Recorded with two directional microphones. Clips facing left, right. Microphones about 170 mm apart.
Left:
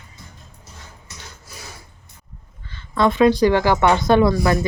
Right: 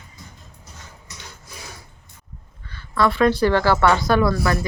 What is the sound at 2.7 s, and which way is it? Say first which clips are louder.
Speech: left 2 dB; 25° left (ahead or behind).